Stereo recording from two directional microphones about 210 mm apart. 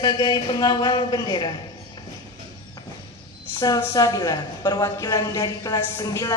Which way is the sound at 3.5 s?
15° left (ahead or behind).